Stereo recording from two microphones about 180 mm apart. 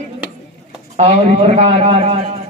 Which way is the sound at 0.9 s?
35° right (ahead or behind).